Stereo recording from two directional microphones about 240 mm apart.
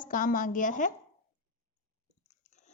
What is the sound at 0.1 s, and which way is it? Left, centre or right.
Speech, left.